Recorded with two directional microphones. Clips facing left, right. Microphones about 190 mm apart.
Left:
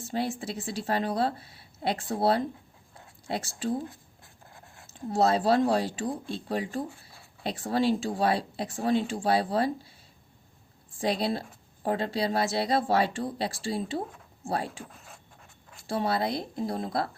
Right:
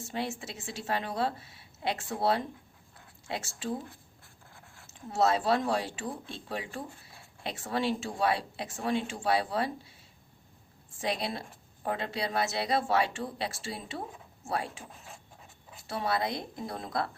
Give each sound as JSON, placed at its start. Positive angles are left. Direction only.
{"t": 0.0, "sound": "a woman's voice", "side_deg": 35}
{"t": 4.5, "sound": "writing", "side_deg": 20}
{"t": 4.9, "sound": "a woman's voice", "side_deg": 35}
{"t": 11.0, "sound": "a woman's voice", "side_deg": 35}
{"t": 14.9, "sound": "pant", "side_deg": 0}
{"t": 15.9, "sound": "a woman's voice", "side_deg": 30}